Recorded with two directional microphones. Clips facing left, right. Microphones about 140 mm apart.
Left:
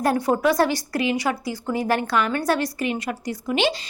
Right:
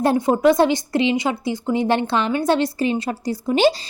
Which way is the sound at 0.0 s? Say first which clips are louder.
Right 4 dB; 25° right (ahead or behind).